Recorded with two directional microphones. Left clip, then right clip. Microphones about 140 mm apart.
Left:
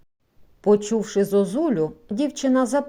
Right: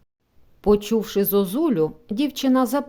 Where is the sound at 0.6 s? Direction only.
25° right (ahead or behind).